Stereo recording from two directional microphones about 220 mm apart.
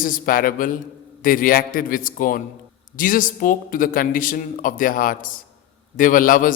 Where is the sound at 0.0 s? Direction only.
40° left (ahead or behind).